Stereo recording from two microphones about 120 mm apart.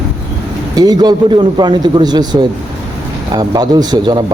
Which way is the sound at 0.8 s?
35° right (ahead or behind).